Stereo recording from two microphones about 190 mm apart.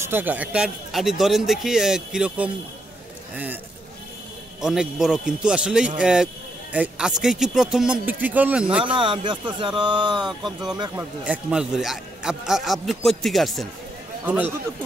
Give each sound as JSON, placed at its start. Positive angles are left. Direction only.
{"t": 0.0, "sound": "speech", "side_deg": -10}
{"t": 4.6, "sound": "speech", "side_deg": 0}
{"t": 8.8, "sound": "speech", "side_deg": -25}
{"t": 10.4, "sound": "a man's voice", "side_deg": 0}